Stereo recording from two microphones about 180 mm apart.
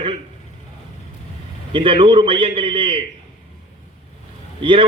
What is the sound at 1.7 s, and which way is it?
A man's voice, 25° right (ahead or behind).